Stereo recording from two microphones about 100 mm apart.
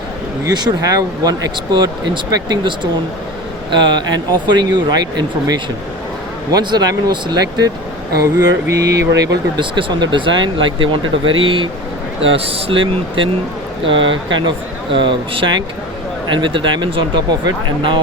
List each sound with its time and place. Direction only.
0.5 s speech: 45° right (ahead or behind)
9.6 s speech: 50° right (ahead or behind)
12.4 s speech: 70° right (ahead or behind); by 17.2 s 55° right (ahead or behind)